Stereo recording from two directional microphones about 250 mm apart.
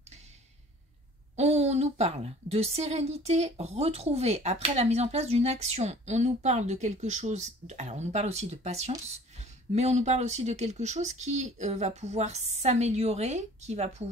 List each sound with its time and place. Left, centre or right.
1.3 s a woman's voice: right